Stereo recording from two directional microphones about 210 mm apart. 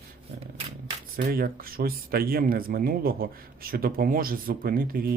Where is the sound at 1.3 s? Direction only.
45° right (ahead or behind).